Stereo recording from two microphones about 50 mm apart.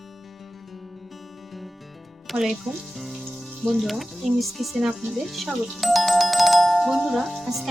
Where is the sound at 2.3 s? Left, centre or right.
Centre.